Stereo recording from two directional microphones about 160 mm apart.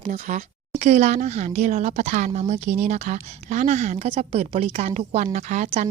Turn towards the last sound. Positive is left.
turn(degrees=-45)  # may be behind; listen again after turning